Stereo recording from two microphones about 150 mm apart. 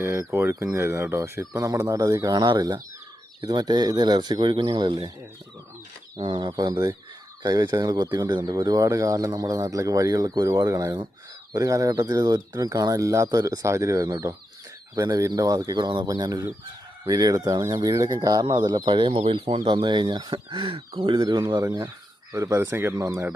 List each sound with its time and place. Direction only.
0.0 s speech: 15° right (ahead or behind)
6.1 s speech: 30° right (ahead or behind)